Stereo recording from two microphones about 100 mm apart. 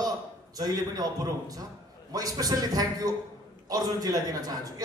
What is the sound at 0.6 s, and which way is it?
A man's voice, 40° right (ahead or behind).